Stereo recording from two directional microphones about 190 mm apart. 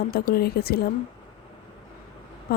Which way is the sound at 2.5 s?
55° left (ahead or behind).